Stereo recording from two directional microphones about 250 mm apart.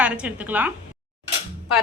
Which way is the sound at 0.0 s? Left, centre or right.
Centre.